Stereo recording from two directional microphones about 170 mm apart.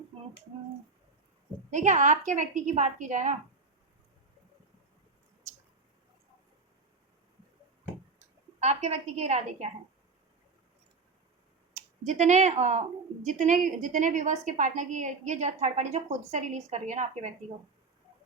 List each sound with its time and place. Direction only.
1.7 s a woman's voice: 45° right (ahead or behind)
8.6 s a woman's voice: 40° right (ahead or behind)
11.7 s a woman's voice: 45° right (ahead or behind)